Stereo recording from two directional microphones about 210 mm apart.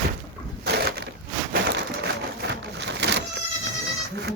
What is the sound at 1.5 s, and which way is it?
Crushing, 50° right (ahead or behind).